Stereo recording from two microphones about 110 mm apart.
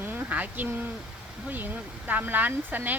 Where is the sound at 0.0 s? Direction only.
20° right (ahead or behind).